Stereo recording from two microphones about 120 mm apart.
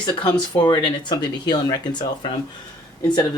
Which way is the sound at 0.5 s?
40° left (ahead or behind).